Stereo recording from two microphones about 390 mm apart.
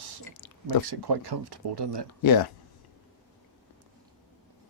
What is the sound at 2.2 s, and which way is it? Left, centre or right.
Speech, left.